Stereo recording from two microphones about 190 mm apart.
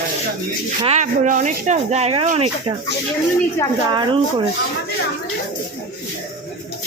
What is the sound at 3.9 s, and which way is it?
Speech, 25° right (ahead or behind).